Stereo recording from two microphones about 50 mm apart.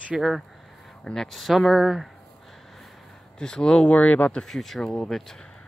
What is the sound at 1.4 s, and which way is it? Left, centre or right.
Speech, centre.